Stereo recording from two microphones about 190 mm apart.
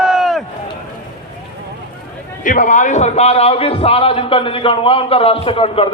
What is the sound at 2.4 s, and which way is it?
A man's voice, 45° left (ahead or behind).